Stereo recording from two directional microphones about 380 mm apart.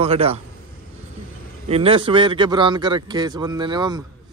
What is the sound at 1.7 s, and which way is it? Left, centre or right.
Speech, centre.